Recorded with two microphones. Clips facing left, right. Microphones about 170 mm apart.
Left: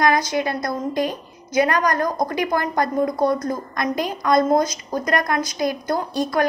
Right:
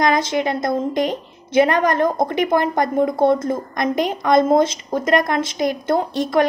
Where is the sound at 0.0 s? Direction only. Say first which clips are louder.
Right 1 dB; 20° right (ahead or behind).